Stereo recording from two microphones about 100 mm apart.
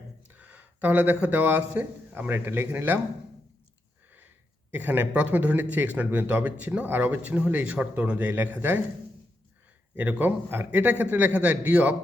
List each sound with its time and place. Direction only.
0.3 s speech: 15° right (ahead or behind)
4.7 s speech: 20° right (ahead or behind)
9.9 s speech: 15° right (ahead or behind)